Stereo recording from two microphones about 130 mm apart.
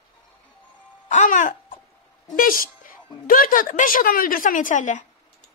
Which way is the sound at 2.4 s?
90° left.